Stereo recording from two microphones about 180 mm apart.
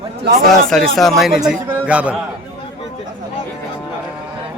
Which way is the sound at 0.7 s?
Centre (ahead or behind).